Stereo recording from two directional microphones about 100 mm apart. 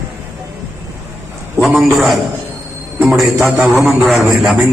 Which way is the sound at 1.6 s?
15° right (ahead or behind).